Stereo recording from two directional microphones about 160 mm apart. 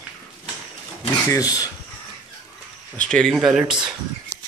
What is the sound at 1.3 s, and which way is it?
Speech, 25° left (ahead or behind).